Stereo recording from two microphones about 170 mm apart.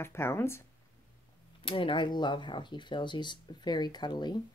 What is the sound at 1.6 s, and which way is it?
Speech, 30° left (ahead or behind).